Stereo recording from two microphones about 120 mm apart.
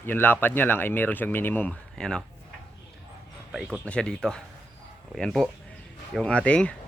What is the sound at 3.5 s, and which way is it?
Speech, 5° right (ahead or behind).